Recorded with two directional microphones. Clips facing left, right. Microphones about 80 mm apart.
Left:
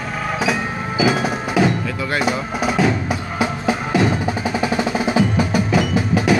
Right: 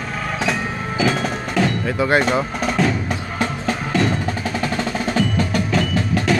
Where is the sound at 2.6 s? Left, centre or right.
Centre.